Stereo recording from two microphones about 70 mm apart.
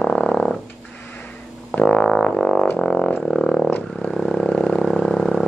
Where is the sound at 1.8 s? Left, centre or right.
Left.